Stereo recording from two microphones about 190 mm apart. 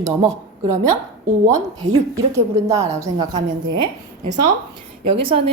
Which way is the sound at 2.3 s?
15° right (ahead or behind).